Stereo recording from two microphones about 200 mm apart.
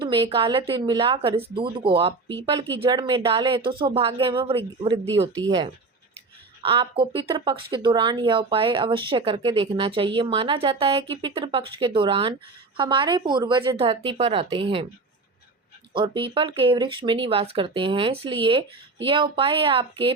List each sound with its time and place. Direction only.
0.0 s speech: 25° right (ahead or behind)
6.6 s speech: 25° right (ahead or behind)
15.9 s speech: 25° right (ahead or behind)